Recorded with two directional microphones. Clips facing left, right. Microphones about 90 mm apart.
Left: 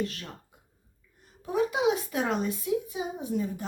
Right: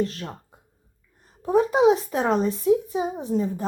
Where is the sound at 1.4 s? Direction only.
35° right (ahead or behind).